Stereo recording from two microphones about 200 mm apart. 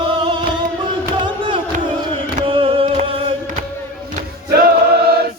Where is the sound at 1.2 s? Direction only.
25° right (ahead or behind).